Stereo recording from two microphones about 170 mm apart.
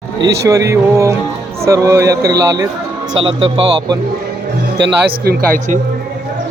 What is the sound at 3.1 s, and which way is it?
Speech, 30° right (ahead or behind).